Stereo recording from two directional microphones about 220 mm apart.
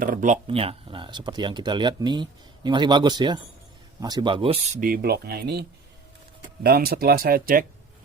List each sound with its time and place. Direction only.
0.0 s speech: 35° right (ahead or behind)